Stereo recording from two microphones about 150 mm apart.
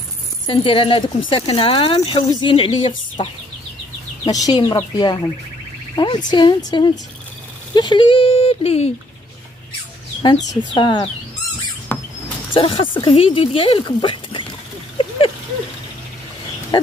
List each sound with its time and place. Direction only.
0.5 s speech: 35° left (ahead or behind)
4.3 s speech: 25° left (ahead or behind); by 8.9 s 45° left (ahead or behind)
10.7 s speech: 30° left (ahead or behind)
11.9 s rodents: 10° left (ahead or behind)
12.5 s speech: 35° left (ahead or behind)
15.0 s patter: 35° left (ahead or behind)